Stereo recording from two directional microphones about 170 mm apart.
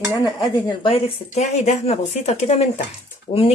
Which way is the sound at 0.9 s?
40° left (ahead or behind).